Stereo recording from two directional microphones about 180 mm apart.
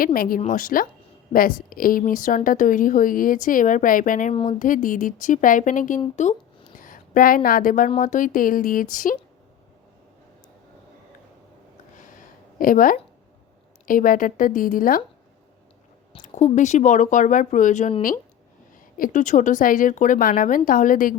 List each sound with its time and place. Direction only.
0.0 s a woman's voice: 55° left (ahead or behind)
6.7 s a woman's voice: 50° left (ahead or behind)
12.5 s a woman's voice: 50° left (ahead or behind)
16.2 s a woman's voice: 40° left (ahead or behind)